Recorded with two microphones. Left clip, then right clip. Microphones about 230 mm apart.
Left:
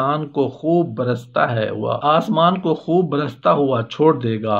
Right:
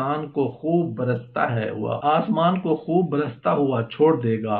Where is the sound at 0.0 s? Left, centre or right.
Left.